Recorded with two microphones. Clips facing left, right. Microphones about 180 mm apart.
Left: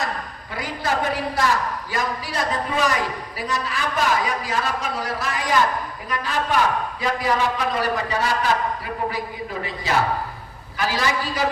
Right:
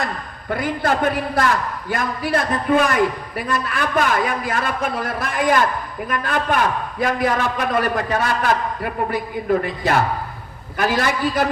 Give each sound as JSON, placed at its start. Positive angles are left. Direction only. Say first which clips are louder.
{"t": 0.5, "sound": "a man's voice", "louder": "right 5 dB", "side_deg": -55}